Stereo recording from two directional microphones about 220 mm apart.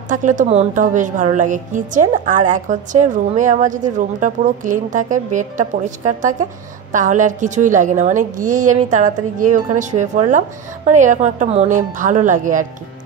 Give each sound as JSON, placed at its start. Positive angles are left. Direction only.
{"t": 0.1, "sound": "a woman's voice", "side_deg": -35}